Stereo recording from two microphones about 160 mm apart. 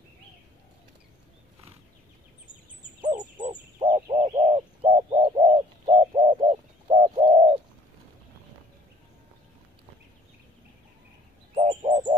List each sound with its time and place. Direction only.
3.2 s fowl: 30° right (ahead or behind)
3.8 s a sound: 45° right (ahead or behind)
7.2 s bird: 40° right (ahead or behind)
11.5 s bird: 40° right (ahead or behind)